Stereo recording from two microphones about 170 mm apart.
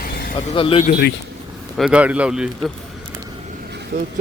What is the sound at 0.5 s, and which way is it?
Speech, 30° left (ahead or behind).